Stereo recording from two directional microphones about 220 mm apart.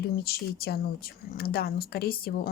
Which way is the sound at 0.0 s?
45° left (ahead or behind).